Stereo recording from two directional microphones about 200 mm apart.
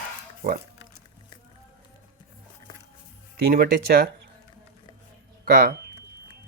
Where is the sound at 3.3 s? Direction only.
50° right (ahead or behind).